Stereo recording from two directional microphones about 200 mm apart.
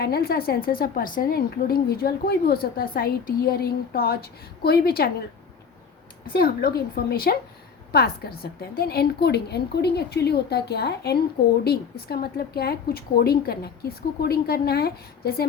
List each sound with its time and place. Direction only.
0.0 s a woman's voice: 50° left (ahead or behind)
7.1 s a woman's voice: 50° left (ahead or behind)